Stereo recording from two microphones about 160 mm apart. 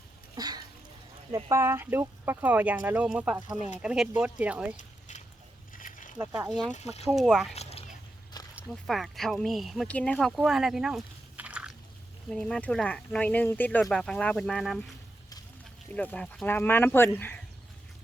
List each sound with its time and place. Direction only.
0.3 s a sound: 25° right (ahead or behind)
1.5 s speech: 15° right (ahead or behind)
4.8 s a sound: 50° left (ahead or behind)
6.3 s speech: 5° right (ahead or behind)
6.7 s speech: 45° left (ahead or behind)
7.1 s speech: centre (ahead or behind)
7.5 s a sound: 40° left (ahead or behind)
8.5 s speech: 5° right (ahead or behind)
12.3 s speech: 5° left (ahead or behind)
15.9 s speech: 10° left (ahead or behind)